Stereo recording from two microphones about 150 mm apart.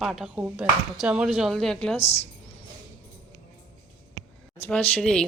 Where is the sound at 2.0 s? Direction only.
45° left (ahead or behind).